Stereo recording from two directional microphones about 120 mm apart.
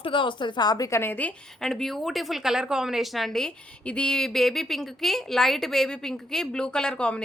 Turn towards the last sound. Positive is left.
turn(degrees=10)  # may be behind; listen again after turning